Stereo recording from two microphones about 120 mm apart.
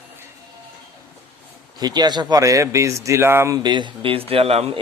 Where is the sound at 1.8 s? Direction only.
35° right (ahead or behind).